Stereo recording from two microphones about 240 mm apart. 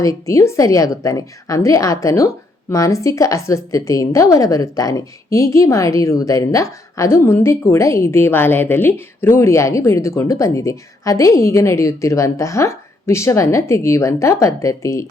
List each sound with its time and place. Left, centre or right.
0.0 s a woman's voice: centre